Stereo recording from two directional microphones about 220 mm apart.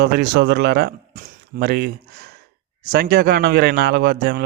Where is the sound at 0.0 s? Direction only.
50° right (ahead or behind).